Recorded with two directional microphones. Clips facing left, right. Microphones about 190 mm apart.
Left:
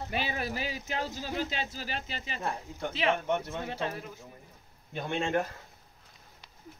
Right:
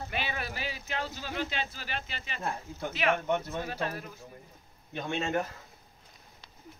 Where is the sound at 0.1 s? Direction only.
40° left (ahead or behind).